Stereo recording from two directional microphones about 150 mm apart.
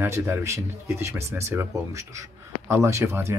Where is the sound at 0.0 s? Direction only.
20° right (ahead or behind).